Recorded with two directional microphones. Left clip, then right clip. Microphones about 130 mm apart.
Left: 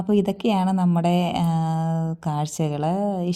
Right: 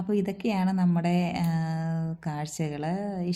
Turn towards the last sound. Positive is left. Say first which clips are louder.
# left 8 dB
turn(degrees=45)  # may be behind; listen again after turning